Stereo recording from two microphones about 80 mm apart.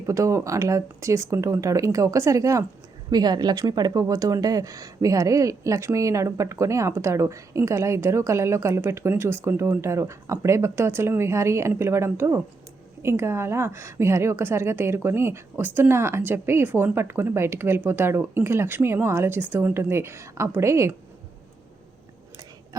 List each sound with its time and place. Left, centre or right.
0.1 s a woman's voice: right
3.1 s a woman's voice: right